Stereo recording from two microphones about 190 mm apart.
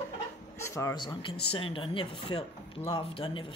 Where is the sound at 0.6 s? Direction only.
15° left (ahead or behind).